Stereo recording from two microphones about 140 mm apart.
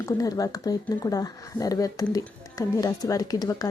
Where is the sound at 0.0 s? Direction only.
25° left (ahead or behind).